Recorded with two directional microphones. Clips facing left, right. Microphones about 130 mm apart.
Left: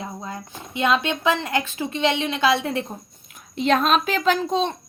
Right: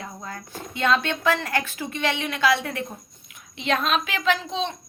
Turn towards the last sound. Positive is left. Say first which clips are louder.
# left 4 dB
turn(degrees=45)  # may be behind; listen again after turning